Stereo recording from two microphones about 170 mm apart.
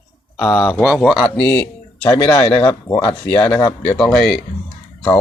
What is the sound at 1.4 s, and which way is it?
Speech, 20° left (ahead or behind).